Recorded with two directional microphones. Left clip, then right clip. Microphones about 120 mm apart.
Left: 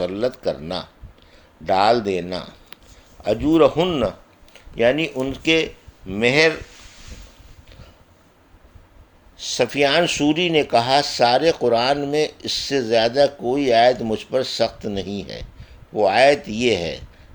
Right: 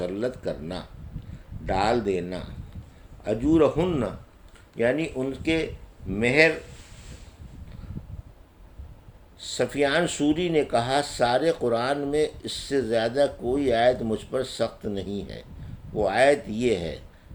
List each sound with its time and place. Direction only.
0.0 s a man's voice: 45° left (ahead or behind)
4.8 s speech: 60° left (ahead or behind)
9.6 s speech: 60° left (ahead or behind)